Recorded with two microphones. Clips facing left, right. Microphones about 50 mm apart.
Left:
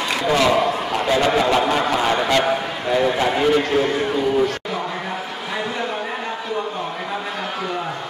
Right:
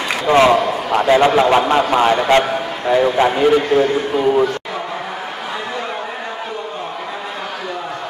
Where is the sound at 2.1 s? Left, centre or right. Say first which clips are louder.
Right 4 dB; right.